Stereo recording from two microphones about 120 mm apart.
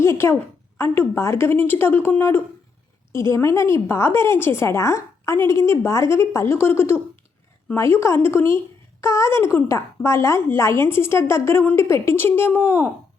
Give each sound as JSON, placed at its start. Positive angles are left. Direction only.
{"t": 0.0, "sound": "a woman's voice", "side_deg": 20}